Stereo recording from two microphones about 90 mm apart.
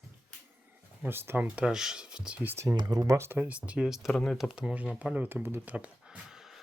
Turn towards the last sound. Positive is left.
turn(degrees=-5)  # may be behind; listen again after turning